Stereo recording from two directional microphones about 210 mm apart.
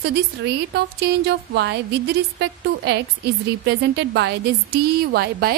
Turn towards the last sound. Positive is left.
turn(degrees=-50)  # may be behind; listen again after turning